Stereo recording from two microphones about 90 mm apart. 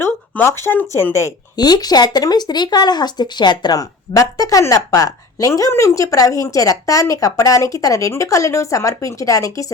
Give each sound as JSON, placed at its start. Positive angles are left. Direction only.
{"t": 0.0, "sound": "speech", "side_deg": 30}
{"t": 1.5, "sound": "speech", "side_deg": 50}